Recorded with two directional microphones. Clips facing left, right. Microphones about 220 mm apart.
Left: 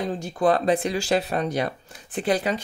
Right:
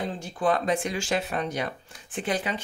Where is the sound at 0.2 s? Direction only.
40° left (ahead or behind).